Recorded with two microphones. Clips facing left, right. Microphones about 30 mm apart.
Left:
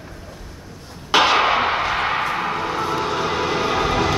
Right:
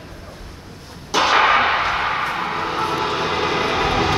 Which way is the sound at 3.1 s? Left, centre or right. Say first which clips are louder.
Right 1 dB; right.